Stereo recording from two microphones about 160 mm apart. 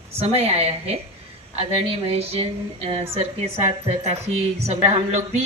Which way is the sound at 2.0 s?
40° right (ahead or behind).